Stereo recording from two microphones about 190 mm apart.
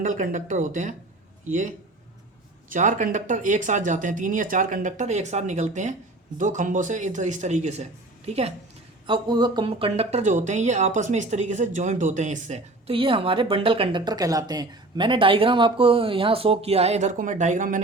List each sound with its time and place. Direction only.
0.0 s speech: 45° right (ahead or behind)